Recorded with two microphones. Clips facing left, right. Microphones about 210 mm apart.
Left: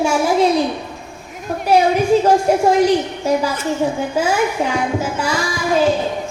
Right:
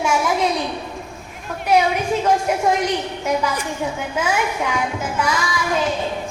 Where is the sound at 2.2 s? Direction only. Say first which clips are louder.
Left 5 dB; 35° left (ahead or behind).